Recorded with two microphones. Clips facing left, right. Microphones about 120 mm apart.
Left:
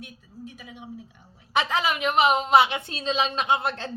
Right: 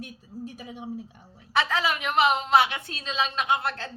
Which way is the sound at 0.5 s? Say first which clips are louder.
Right 4 dB; 40° right (ahead or behind).